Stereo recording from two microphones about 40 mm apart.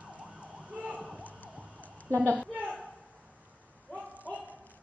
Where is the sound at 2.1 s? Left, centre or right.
Left.